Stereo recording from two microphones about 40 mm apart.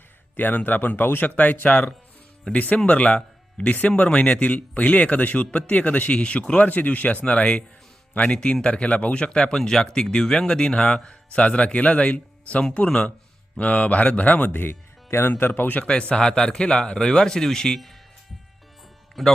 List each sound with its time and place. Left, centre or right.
0.3 s speech: left
1.4 s speech: left
5.8 s speech: left
6.1 s speech: left
6.7 s speech: left
14.5 s speech: left
15.3 s speech: left
15.8 s speech: left
19.2 s speech: centre